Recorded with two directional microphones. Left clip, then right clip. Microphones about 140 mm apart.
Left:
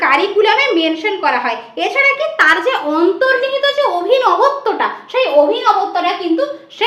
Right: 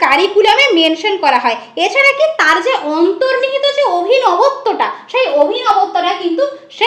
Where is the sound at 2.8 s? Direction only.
15° right (ahead or behind).